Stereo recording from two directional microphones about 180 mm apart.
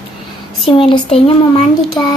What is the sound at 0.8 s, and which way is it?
Speech, 30° left (ahead or behind).